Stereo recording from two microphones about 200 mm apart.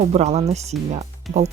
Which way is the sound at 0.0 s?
35° right (ahead or behind).